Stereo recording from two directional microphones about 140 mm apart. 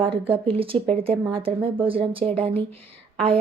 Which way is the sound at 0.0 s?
40° right (ahead or behind).